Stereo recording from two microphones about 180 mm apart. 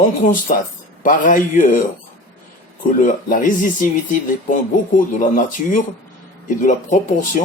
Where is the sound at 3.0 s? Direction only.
50° left (ahead or behind).